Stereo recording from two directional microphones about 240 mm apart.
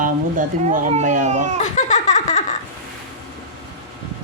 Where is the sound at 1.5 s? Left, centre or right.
Left.